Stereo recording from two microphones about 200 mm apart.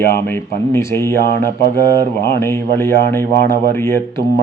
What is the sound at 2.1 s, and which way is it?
Mantra, 55° left (ahead or behind).